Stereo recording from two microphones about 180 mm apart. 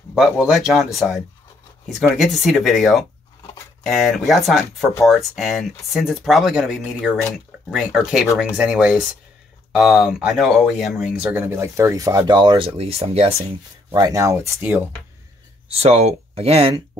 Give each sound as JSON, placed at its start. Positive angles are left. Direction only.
{"t": 0.1, "sound": "speech", "side_deg": 0}
{"t": 13.9, "sound": "speech", "side_deg": -15}
{"t": 15.7, "sound": "speech", "side_deg": -35}